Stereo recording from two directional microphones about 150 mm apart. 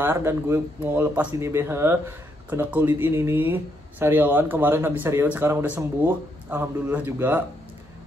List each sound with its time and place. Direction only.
0.0 s speech: 15° right (ahead or behind)